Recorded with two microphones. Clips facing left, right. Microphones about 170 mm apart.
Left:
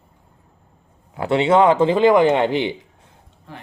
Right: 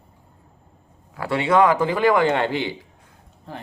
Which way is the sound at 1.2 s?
20° left (ahead or behind).